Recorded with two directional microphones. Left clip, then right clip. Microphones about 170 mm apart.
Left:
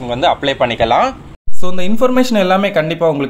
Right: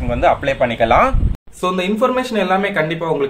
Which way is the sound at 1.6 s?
45° left (ahead or behind).